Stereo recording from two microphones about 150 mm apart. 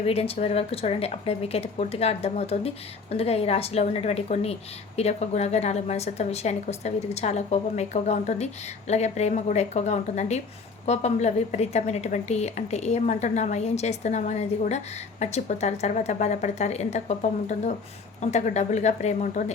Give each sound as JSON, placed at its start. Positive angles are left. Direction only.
{"t": 0.0, "sound": "a woman's voice", "side_deg": 40}